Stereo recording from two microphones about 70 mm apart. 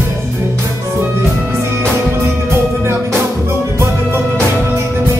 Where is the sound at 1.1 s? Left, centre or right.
Right.